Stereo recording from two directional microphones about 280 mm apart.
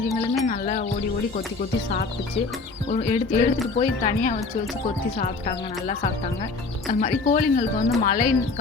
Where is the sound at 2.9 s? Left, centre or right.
Left.